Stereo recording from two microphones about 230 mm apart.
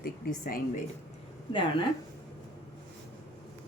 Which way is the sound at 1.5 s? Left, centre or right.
Left.